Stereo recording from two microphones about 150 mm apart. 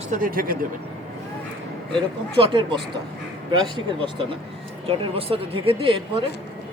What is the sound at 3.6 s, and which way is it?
Speech, 30° right (ahead or behind).